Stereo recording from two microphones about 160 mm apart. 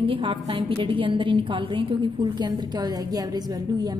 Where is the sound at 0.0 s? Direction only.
35° right (ahead or behind).